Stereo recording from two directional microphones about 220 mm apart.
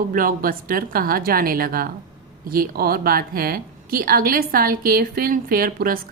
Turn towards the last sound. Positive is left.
turn(degrees=-40)  # may be behind; listen again after turning